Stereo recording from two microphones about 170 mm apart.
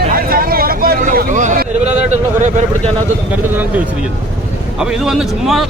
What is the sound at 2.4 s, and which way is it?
Speech, 45° right (ahead or behind).